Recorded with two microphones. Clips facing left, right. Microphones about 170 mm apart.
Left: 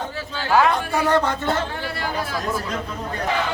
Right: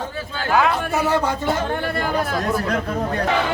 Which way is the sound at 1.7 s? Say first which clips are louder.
Right 5 dB; 55° right (ahead or behind).